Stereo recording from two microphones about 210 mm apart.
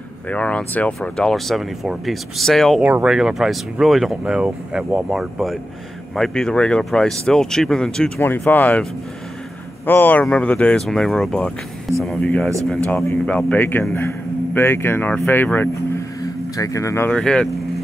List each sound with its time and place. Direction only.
0.3 s speech: 5° left (ahead or behind)
9.8 s a man's voice: 10° left (ahead or behind)